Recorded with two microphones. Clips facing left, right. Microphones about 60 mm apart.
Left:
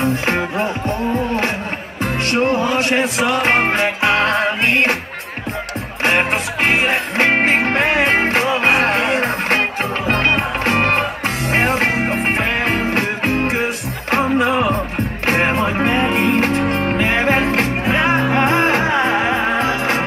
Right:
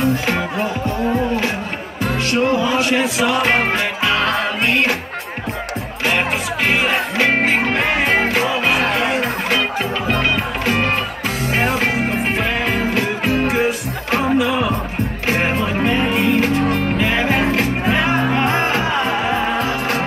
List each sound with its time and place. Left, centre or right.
0.0 s music: left
6.0 s music: left